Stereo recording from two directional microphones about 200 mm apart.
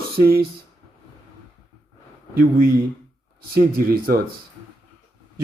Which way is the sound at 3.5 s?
50° right (ahead or behind).